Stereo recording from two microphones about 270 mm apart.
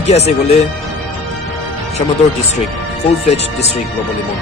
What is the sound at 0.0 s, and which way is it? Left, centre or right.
Speech, left.